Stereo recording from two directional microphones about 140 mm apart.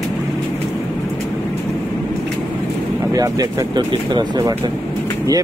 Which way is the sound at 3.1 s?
25° right (ahead or behind).